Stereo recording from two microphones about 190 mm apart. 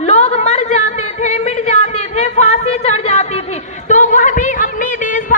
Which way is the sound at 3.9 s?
40° left (ahead or behind).